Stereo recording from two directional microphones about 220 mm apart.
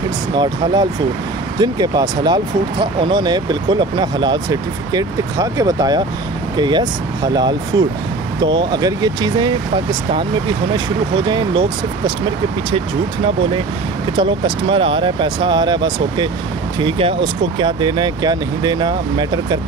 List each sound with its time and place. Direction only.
0.3 s speech: 20° right (ahead or behind)
11.2 s speech: 20° right (ahead or behind)
14.1 s speech: 20° right (ahead or behind)